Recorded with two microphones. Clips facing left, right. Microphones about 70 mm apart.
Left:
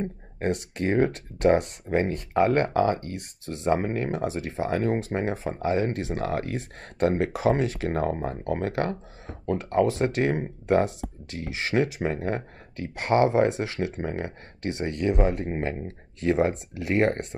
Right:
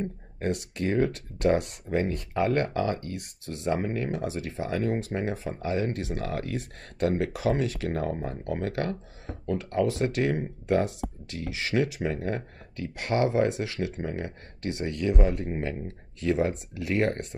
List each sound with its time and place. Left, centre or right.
0.0 s speech: left